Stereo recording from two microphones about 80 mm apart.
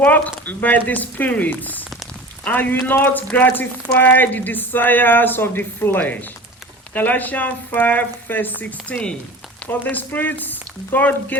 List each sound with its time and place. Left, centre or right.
0.0 s speech: left